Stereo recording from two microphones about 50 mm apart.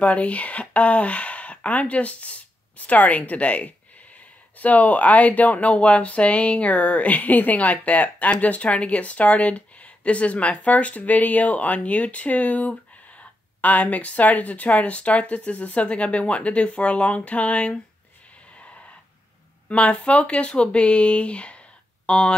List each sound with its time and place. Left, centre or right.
0.0 s speech: left
19.7 s speech: left